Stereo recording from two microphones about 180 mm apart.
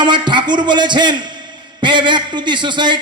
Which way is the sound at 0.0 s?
25° right (ahead or behind).